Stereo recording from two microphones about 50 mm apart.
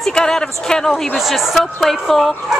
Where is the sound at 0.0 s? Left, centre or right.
Centre.